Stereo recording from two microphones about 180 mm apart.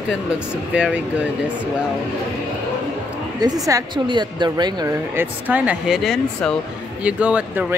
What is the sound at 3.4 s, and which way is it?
Speech, 20° right (ahead or behind).